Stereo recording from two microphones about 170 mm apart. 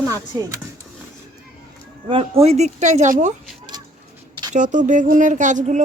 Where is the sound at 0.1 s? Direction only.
20° right (ahead or behind).